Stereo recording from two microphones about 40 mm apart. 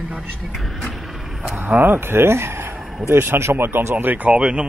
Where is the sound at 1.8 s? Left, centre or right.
Right.